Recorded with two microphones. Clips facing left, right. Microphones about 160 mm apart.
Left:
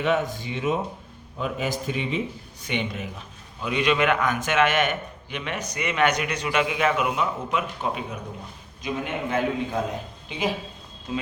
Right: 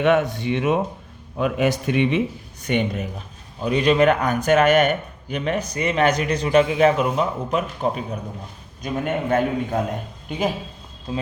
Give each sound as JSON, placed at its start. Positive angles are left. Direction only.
{"t": 0.0, "sound": "a man's voice", "side_deg": -60}
{"t": 2.6, "sound": "a man's voice", "side_deg": -45}